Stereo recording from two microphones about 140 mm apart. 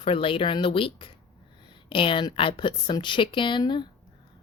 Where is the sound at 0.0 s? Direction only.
40° left (ahead or behind).